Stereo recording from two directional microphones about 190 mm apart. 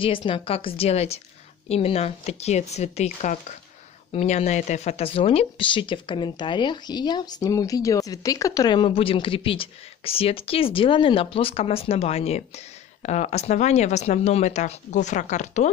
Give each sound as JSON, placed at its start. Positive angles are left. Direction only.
{"t": 0.0, "sound": "speech", "side_deg": 25}